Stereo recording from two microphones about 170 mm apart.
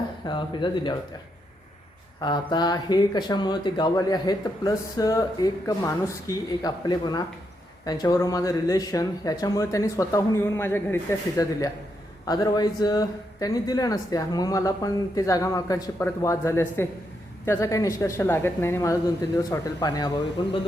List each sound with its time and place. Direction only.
0.3 s speech: 30° left (ahead or behind)
2.2 s speech: 25° left (ahead or behind)